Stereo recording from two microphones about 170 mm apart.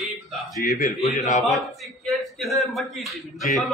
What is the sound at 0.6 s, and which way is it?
Speech, 55° left (ahead or behind).